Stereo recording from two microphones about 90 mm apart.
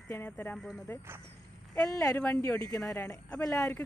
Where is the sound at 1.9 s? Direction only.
40° left (ahead or behind).